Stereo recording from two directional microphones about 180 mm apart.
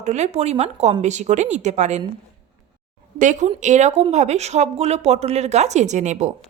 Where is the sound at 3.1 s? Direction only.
45° right (ahead or behind).